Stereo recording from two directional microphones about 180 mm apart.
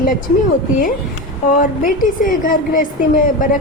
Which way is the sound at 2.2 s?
50° left (ahead or behind).